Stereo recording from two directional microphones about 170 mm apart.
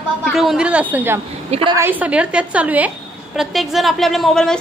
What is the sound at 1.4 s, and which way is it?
Speech, 35° right (ahead or behind).